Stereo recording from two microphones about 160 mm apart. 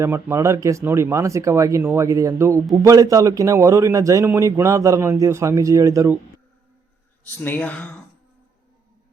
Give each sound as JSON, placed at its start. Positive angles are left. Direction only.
{"t": 0.0, "sound": "a man's voice", "side_deg": -15}
{"t": 7.3, "sound": "speech", "side_deg": 10}